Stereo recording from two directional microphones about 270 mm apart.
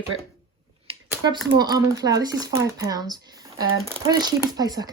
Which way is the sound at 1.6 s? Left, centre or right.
Centre.